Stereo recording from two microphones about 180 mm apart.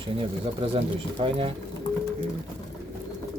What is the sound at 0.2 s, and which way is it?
Speech, 30° right (ahead or behind).